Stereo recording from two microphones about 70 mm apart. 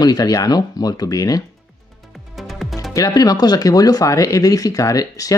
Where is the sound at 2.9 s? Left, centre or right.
Left.